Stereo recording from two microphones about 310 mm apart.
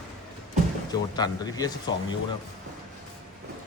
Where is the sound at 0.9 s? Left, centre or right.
Centre.